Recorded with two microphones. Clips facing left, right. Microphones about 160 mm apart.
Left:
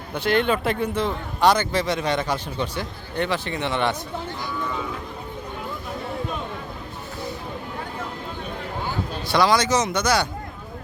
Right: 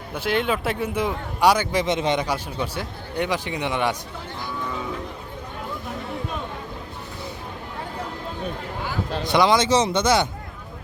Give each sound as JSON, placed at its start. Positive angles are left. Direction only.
{"t": 0.1, "sound": "a man's voice", "side_deg": -5}
{"t": 9.2, "sound": "speech", "side_deg": -20}